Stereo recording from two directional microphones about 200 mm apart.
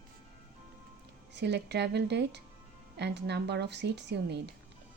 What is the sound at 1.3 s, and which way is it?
A woman's voice, 60° right (ahead or behind).